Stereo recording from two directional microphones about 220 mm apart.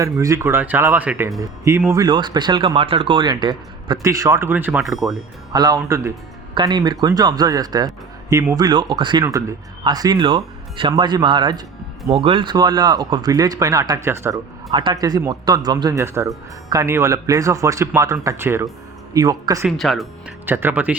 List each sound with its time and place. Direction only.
0.0 s speech: 15° right (ahead or behind)
5.5 s speech: 15° right (ahead or behind)
19.6 s speech: centre (ahead or behind)